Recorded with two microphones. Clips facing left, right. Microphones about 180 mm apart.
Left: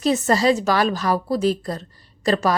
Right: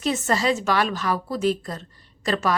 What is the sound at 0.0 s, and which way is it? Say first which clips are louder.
A woman's voice: left 5 dB; 35° left (ahead or behind).